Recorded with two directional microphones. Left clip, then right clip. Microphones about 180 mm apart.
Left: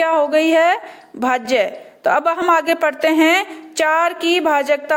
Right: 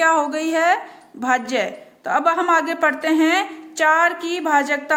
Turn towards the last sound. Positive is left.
turn(degrees=40)  # may be behind; listen again after turning